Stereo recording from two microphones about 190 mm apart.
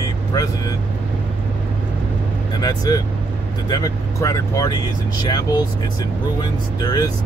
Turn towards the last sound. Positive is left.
turn(degrees=20)  # may be behind; listen again after turning